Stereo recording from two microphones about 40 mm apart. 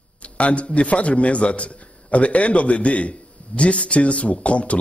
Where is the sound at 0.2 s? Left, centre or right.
Left.